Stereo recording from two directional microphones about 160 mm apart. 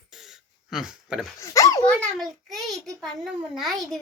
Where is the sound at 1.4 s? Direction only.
20° left (ahead or behind).